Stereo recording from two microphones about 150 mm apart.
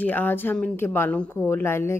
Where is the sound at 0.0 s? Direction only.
10° left (ahead or behind).